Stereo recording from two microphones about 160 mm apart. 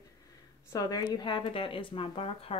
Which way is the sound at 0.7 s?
25° left (ahead or behind).